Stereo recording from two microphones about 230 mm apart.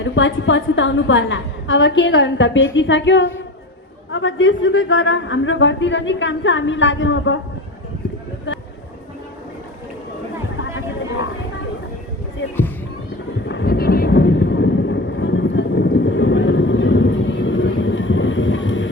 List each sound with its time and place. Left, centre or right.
0.0 s a woman's voice: left
13.5 s thunder: left